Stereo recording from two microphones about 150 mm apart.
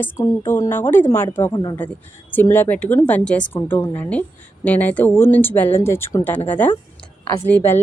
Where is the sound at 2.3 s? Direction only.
15° left (ahead or behind).